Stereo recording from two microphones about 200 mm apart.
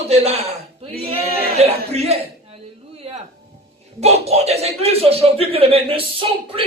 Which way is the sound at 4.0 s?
30° right (ahead or behind).